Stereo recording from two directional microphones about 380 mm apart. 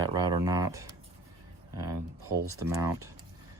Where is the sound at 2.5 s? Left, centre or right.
Centre.